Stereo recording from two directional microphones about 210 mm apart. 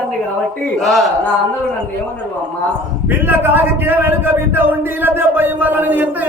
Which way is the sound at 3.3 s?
10° right (ahead or behind).